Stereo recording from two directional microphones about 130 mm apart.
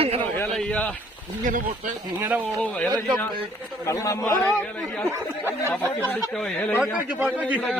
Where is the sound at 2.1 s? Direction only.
15° right (ahead or behind).